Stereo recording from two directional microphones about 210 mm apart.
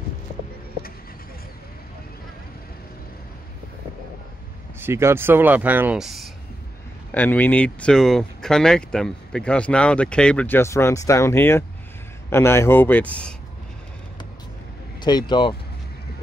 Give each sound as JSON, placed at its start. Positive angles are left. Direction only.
{"t": 4.7, "sound": "speech", "side_deg": -10}
{"t": 15.0, "sound": "speech", "side_deg": 20}